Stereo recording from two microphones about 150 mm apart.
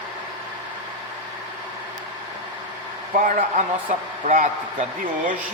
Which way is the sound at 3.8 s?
60° right (ahead or behind).